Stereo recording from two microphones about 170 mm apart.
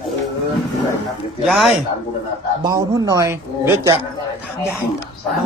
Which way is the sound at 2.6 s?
20° right (ahead or behind).